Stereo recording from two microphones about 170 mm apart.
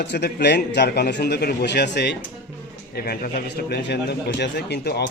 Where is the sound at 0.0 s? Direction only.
75° left (ahead or behind).